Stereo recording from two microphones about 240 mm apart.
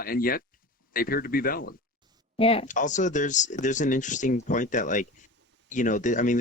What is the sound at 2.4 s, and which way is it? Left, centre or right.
Speech, left.